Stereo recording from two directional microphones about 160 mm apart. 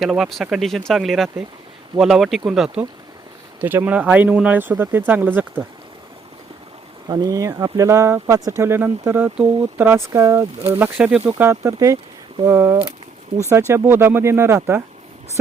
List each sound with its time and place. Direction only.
0.0 s speech: centre (ahead or behind)
7.1 s speech: 25° right (ahead or behind)